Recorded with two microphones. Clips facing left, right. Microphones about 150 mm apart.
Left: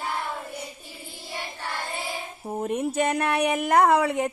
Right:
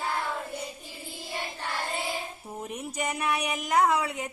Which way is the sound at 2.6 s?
55° left (ahead or behind).